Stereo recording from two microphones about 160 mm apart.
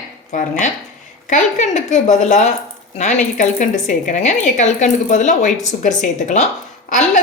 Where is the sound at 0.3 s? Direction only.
50° left (ahead or behind).